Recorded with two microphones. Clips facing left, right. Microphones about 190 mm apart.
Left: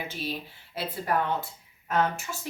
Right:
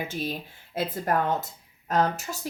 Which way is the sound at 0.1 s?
45° right (ahead or behind).